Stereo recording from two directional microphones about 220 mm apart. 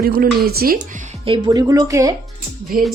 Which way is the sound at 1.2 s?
20° right (ahead or behind).